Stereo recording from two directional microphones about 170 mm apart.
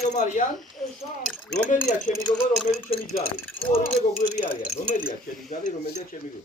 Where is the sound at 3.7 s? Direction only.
35° left (ahead or behind).